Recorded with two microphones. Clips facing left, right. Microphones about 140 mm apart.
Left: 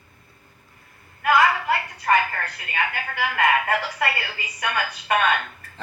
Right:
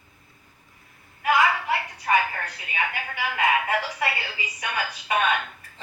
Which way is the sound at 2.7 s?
60° left (ahead or behind).